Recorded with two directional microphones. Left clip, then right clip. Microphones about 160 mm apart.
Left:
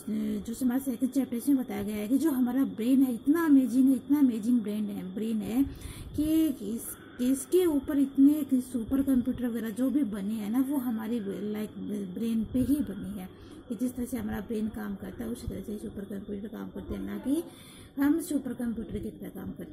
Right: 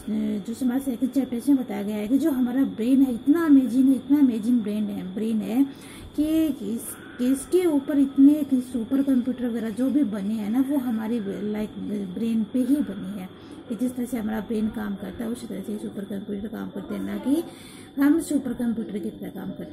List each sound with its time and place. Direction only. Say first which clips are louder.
0.1 s a woman's voice: right 5 dB; 30° left (ahead or behind)
13.8 s a woman's voice: right 6 dB; 15° left (ahead or behind)